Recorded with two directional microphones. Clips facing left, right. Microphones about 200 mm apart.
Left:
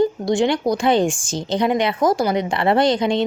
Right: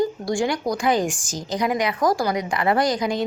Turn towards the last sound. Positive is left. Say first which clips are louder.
# left 4 dB
turn(degrees=25)  # may be behind; listen again after turning